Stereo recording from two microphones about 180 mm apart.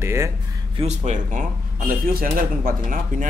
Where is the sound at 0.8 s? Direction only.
40° right (ahead or behind).